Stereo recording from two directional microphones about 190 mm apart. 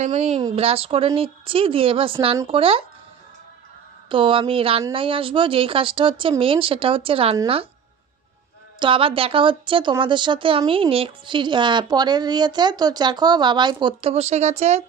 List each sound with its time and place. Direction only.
0.0 s a woman's voice: 35° right (ahead or behind)
4.1 s a woman's voice: 25° right (ahead or behind)
8.7 s a woman's voice: 25° right (ahead or behind)